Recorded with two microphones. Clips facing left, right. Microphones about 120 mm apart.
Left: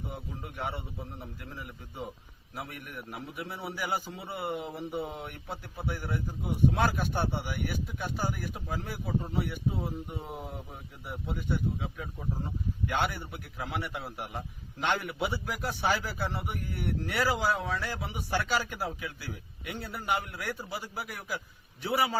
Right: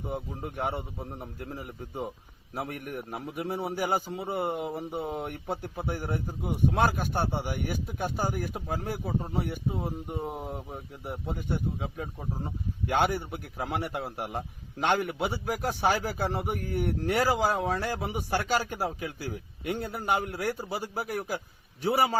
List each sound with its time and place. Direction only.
0.1 s a man's voice: 45° right (ahead or behind)